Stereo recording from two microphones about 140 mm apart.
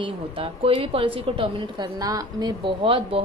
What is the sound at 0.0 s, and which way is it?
A woman's voice, 40° right (ahead or behind).